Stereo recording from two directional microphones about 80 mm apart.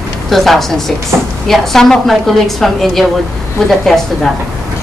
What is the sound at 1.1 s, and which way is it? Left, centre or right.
Speech, right.